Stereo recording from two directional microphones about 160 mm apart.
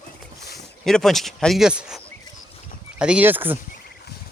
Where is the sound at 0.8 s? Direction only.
Centre (ahead or behind).